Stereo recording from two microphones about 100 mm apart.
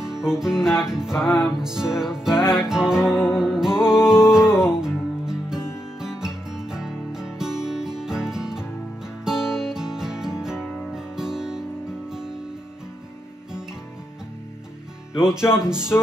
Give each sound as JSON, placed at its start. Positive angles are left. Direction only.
{"t": 0.0, "sound": "music", "side_deg": -5}
{"t": 15.1, "sound": "music", "side_deg": -5}
{"t": 15.9, "sound": "music", "side_deg": 25}